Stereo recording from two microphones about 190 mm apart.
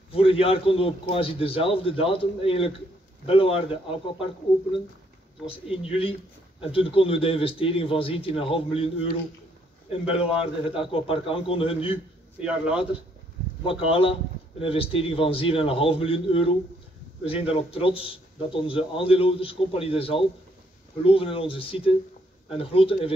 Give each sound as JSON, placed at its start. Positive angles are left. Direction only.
{"t": 0.1, "sound": "speech", "side_deg": 30}
{"t": 5.4, "sound": "a man's voice", "side_deg": -5}
{"t": 6.6, "sound": "speech", "side_deg": 30}
{"t": 12.4, "sound": "a man's voice", "side_deg": -5}
{"t": 13.7, "sound": "speech", "side_deg": 30}